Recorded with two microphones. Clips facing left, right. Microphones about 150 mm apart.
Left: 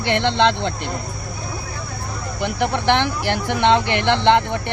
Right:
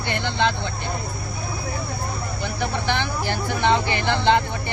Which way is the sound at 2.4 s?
70° left (ahead or behind).